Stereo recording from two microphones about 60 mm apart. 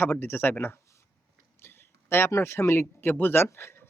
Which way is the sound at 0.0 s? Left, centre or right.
Left.